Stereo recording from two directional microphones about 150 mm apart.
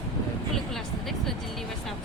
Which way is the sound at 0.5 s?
Centre (ahead or behind).